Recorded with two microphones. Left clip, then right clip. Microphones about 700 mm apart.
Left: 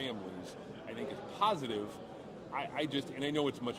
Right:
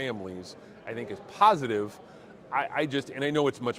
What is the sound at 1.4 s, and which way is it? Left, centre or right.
Speech, right.